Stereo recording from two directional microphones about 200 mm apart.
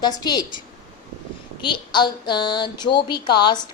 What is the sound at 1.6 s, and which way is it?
A woman's voice, 25° left (ahead or behind).